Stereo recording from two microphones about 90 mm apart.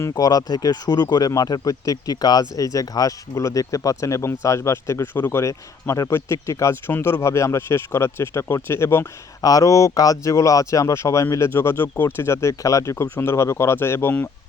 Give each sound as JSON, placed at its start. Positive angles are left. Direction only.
{"t": 0.0, "sound": "speech", "side_deg": 45}
{"t": 9.4, "sound": "speech", "side_deg": 40}